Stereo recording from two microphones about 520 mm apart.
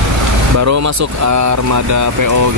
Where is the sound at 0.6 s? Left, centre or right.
Right.